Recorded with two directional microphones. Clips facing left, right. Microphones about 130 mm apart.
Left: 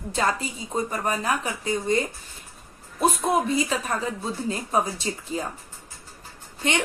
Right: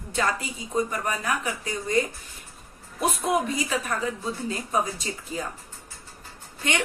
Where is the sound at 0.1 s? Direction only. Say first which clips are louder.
Left 2 dB; 30° left (ahead or behind).